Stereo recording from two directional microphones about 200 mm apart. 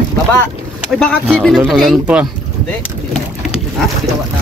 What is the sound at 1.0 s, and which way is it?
A man's voice, 5° left (ahead or behind).